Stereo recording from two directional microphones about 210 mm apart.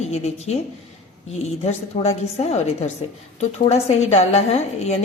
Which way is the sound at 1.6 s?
30° left (ahead or behind).